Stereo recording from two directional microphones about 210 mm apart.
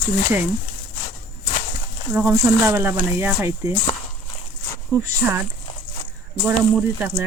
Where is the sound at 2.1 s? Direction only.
10° right (ahead or behind).